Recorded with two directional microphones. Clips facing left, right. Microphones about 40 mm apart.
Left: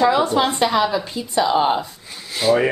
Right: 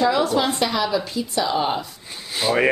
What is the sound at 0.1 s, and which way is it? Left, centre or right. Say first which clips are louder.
A woman's voice: left 2 dB; left.